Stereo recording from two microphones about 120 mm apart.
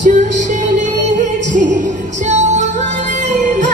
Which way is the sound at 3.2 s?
90° right.